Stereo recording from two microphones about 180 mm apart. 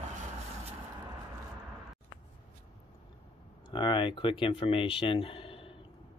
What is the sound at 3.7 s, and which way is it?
Speech, 25° left (ahead or behind).